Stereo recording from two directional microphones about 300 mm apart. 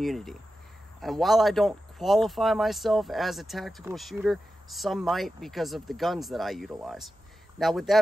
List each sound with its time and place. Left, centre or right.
0.0 s speech: centre